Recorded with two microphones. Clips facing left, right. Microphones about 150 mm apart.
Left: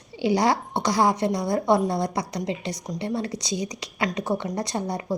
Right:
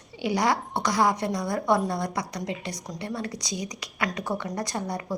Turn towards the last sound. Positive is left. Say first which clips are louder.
# left 3 dB
turn(degrees=25)  # may be behind; listen again after turning